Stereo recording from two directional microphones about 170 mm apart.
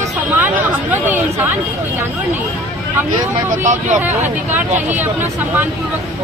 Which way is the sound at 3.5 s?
45° right (ahead or behind).